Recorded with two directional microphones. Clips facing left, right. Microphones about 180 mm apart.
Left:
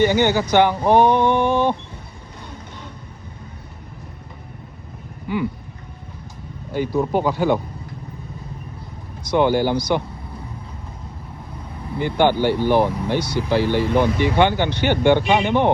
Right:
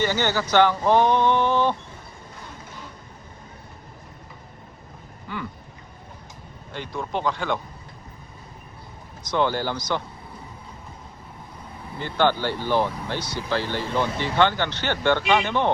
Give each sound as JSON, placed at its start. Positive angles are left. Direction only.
{"t": 0.0, "sound": "speech", "side_deg": 15}
{"t": 1.0, "sound": "a sound", "side_deg": 55}
{"t": 5.3, "sound": "speech", "side_deg": 15}
{"t": 6.7, "sound": "speech", "side_deg": 5}
{"t": 9.3, "sound": "speech", "side_deg": 15}
{"t": 11.9, "sound": "speech", "side_deg": 15}